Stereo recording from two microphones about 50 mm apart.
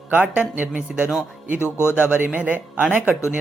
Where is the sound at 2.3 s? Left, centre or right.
Right.